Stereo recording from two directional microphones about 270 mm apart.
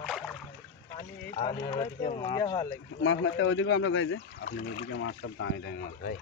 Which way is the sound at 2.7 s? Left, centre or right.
Left.